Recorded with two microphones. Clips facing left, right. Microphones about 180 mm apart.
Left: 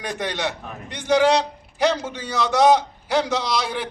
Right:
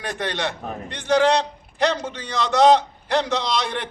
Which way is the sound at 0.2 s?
10° left (ahead or behind).